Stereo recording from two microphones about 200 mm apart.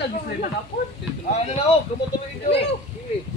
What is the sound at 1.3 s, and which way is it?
Speech, 35° left (ahead or behind).